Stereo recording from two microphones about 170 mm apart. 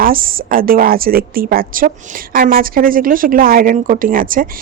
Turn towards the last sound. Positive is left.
turn(degrees=-55)  # may be behind; listen again after turning